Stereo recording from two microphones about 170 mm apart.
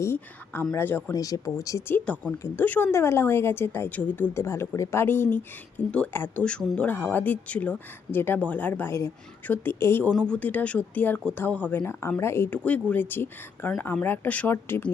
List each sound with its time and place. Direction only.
0.0 s speech: 15° left (ahead or behind)